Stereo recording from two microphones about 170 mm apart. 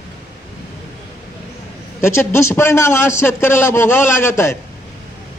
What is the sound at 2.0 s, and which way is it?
A man's voice, 15° left (ahead or behind).